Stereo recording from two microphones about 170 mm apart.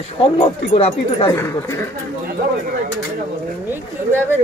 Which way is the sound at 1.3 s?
15° left (ahead or behind).